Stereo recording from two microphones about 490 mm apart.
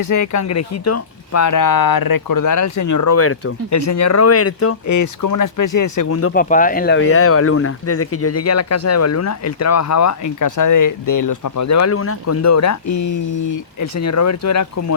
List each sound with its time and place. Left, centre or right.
0.0 s speech: left
6.3 s speech: centre; by 14.9 s left